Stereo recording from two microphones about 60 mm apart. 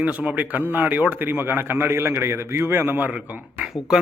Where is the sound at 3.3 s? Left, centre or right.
Right.